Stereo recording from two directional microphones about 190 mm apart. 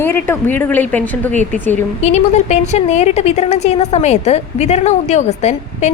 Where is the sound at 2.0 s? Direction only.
35° left (ahead or behind).